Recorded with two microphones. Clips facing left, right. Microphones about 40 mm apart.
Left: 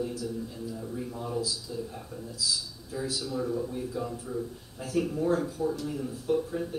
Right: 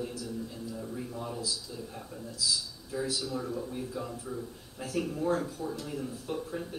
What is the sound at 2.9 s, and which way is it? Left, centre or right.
Speech, centre.